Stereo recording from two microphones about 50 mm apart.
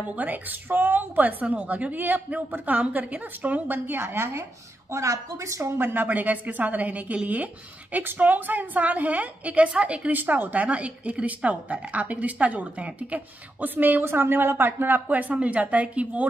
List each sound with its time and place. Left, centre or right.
0.0 s a woman's voice: right
4.9 s a woman's voice: right
6.0 s a woman's voice: right
7.9 s a woman's voice: right
14.0 s a woman's voice: right
15.0 s a woman's voice: right